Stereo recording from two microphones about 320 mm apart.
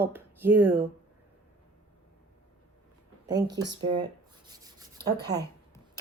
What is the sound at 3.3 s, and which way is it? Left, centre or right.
Speech, centre.